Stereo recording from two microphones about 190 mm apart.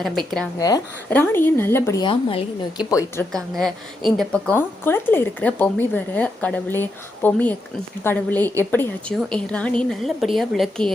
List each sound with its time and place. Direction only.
0.0 s a woman's voice: centre (ahead or behind); by 3.2 s 15° left (ahead or behind)
3.3 s a woman's voice: centre (ahead or behind)